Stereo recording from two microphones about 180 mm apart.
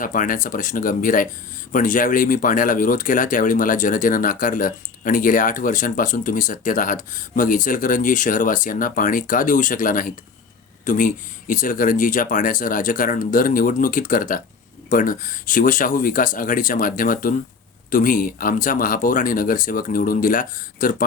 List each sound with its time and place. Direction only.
0.0 s speech: 50° left (ahead or behind)